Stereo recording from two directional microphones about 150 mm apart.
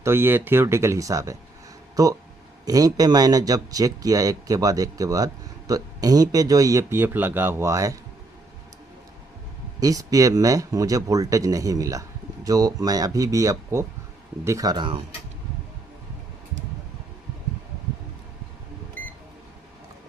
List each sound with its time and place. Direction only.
0.0 s speech: 15° right (ahead or behind)
9.8 s speech: 25° right (ahead or behind)